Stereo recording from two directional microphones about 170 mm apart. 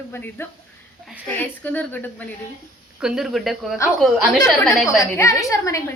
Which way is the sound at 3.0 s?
5° right (ahead or behind).